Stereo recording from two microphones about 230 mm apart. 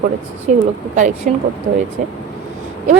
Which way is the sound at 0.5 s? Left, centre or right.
Right.